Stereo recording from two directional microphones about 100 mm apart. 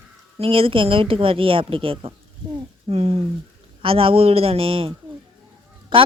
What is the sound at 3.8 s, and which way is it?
A woman's voice, 65° right (ahead or behind).